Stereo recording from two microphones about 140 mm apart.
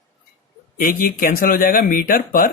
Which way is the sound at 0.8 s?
90° left.